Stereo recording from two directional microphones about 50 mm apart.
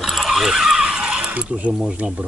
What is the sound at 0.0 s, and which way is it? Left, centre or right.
Horse, centre.